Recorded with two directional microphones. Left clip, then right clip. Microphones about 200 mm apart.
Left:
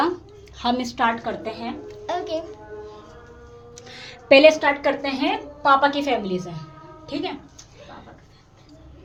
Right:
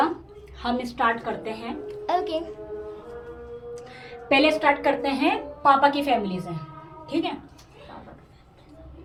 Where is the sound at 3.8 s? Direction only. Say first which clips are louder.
Even; 45° left (ahead or behind).